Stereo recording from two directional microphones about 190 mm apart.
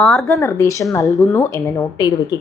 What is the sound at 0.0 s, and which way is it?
Speech, centre (ahead or behind).